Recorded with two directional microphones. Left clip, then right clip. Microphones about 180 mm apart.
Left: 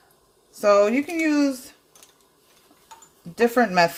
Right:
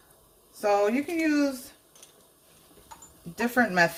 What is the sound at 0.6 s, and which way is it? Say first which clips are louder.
Speech: left 6 dB; 45° left (ahead or behind).